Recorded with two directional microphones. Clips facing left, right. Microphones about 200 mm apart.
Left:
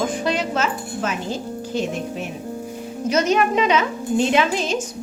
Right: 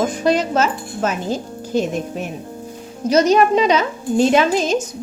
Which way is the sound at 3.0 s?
35° right (ahead or behind).